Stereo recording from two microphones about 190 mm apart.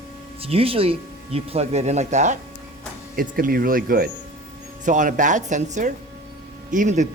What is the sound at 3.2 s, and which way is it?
A man's voice, 50° right (ahead or behind).